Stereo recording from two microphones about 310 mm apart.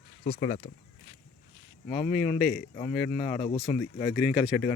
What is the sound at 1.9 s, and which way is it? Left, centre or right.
Speech, left.